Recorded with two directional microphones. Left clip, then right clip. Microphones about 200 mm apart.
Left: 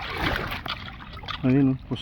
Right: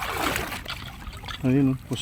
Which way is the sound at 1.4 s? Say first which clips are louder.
Left 1 dB; centre (ahead or behind).